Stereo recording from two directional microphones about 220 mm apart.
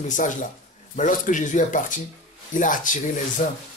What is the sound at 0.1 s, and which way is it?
Speech, 35° left (ahead or behind).